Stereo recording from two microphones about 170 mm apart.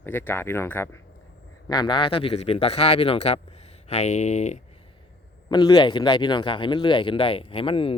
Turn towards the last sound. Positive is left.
turn(degrees=30)  # may be behind; listen again after turning